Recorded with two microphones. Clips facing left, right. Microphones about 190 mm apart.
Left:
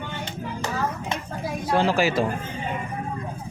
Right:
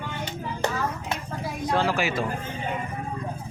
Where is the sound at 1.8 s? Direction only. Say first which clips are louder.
Left 4 dB; 35° left (ahead or behind).